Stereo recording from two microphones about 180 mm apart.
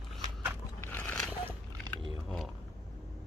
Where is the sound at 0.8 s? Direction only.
10° left (ahead or behind).